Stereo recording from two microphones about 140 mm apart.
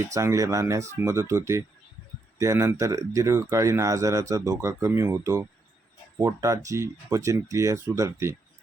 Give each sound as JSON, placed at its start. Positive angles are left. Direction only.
{"t": 0.1, "sound": "speech", "side_deg": -20}